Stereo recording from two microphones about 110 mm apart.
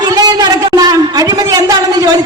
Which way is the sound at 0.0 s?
35° right (ahead or behind).